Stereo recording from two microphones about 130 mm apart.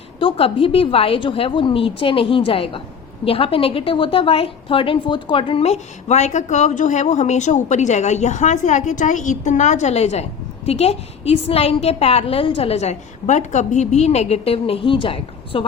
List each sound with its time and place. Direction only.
0.2 s a woman's voice: 45° left (ahead or behind)